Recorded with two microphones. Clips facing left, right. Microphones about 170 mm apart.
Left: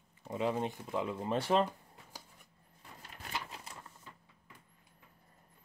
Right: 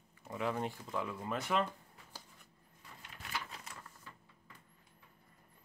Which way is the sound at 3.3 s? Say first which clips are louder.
Left 2 dB; 25° left (ahead or behind).